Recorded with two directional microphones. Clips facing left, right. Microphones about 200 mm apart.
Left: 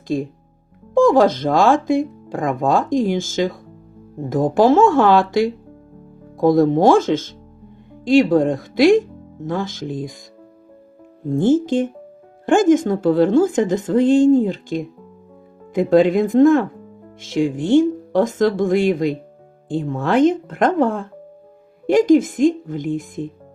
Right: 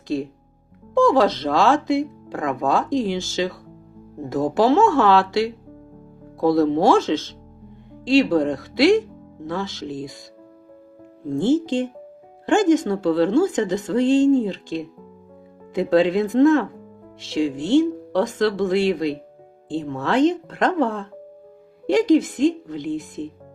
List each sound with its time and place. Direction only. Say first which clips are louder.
0.9 s speech: left 3 dB; 50° left (ahead or behind)
11.3 s speech: left 3 dB; 50° left (ahead or behind)